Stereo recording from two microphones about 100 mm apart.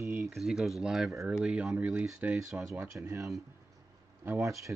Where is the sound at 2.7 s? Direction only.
30° right (ahead or behind).